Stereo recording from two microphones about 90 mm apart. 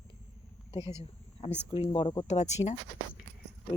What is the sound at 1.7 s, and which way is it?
Speech, 90° left.